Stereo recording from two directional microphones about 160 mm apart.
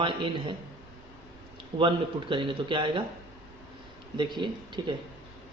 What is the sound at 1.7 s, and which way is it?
A man's voice, 30° right (ahead or behind).